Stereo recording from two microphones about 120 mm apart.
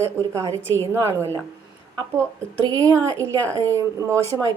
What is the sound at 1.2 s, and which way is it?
Speech, 20° left (ahead or behind).